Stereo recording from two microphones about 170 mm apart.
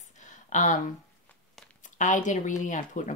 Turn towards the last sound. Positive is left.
turn(degrees=45)  # may be behind; listen again after turning